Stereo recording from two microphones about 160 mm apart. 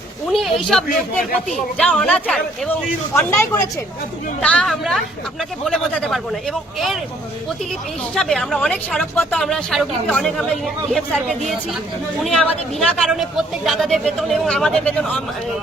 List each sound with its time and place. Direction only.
0.3 s a woman's voice: centre (ahead or behind)
8.1 s speech: 5° left (ahead or behind)